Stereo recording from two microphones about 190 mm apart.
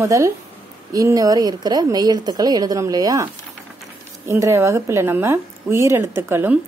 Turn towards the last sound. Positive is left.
turn(degrees=-10)  # may be behind; listen again after turning